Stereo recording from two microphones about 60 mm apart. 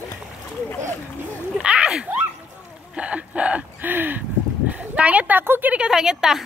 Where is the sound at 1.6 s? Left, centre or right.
Centre.